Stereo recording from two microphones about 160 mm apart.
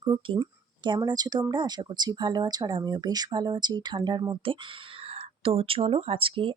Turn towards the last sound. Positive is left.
turn(degrees=-35)  # may be behind; listen again after turning